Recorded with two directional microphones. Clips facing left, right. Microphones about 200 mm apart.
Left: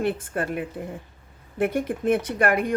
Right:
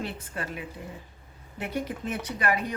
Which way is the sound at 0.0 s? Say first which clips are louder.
Left 9 dB; 55° left (ahead or behind).